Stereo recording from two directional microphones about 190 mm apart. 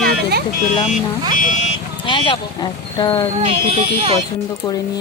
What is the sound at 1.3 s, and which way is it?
Speech, 45° left (ahead or behind).